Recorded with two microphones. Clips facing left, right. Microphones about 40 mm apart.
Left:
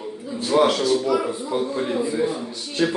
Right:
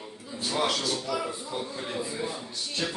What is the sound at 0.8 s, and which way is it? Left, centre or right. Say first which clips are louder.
A man's voice: left 10 dB; centre.